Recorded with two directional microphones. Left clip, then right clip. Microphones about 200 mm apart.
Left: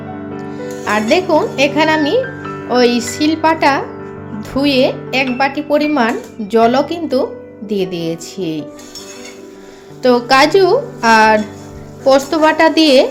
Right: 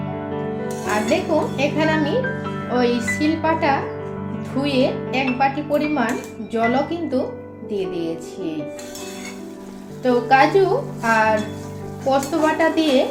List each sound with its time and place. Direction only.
0.9 s speech: 45° left (ahead or behind)
10.0 s speech: 45° left (ahead or behind)